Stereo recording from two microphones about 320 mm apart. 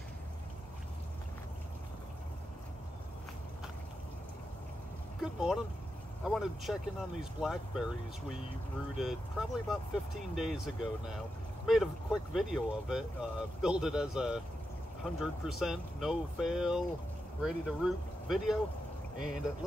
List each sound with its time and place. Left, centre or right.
6.2 s speech: centre
19.1 s speech: right